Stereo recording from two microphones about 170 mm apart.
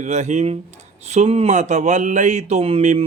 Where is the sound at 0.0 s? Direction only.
45° right (ahead or behind).